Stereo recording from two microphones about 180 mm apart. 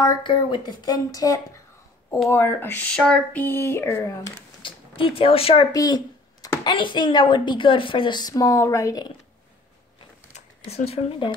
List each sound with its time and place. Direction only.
0.0 s a woman's voice: 25° left (ahead or behind)
4.6 s speech: 30° left (ahead or behind)
5.7 s a sound: 20° left (ahead or behind)
6.6 s a woman's voice: 25° left (ahead or behind)
10.3 s speech: 35° left (ahead or behind)